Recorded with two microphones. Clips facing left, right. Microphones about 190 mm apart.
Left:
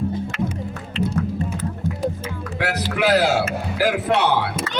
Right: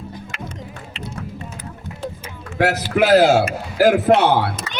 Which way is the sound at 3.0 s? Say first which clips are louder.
Right 5 dB; 45° right (ahead or behind).